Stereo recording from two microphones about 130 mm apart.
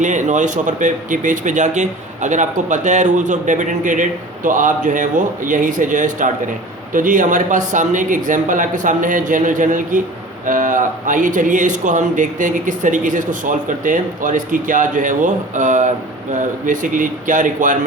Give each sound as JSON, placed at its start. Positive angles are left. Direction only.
{"t": 0.0, "sound": "speech", "side_deg": -70}